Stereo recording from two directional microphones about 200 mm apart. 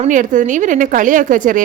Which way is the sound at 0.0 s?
40° right (ahead or behind).